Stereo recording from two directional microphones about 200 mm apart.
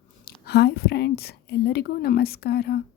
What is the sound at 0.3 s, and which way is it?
A woman's voice, 55° left (ahead or behind).